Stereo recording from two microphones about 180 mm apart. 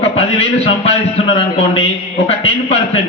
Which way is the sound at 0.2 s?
35° left (ahead or behind).